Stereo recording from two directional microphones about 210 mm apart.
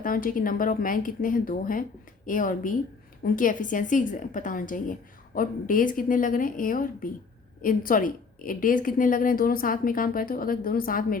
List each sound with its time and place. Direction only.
0.0 s a woman's voice: 40° left (ahead or behind)